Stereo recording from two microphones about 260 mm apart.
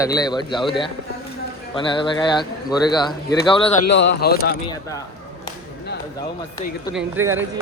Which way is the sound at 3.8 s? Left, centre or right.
Left.